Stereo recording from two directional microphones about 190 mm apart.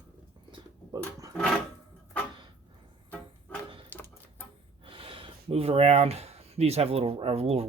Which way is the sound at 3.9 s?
10° left (ahead or behind).